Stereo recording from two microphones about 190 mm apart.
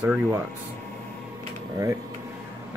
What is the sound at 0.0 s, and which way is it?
Speech, 10° right (ahead or behind).